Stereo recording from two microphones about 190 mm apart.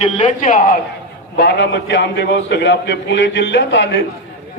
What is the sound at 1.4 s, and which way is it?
A man's voice, 65° left (ahead or behind).